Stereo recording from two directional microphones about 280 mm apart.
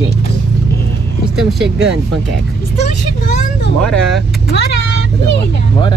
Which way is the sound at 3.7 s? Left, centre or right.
Centre.